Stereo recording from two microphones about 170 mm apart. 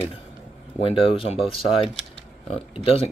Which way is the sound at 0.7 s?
30° left (ahead or behind).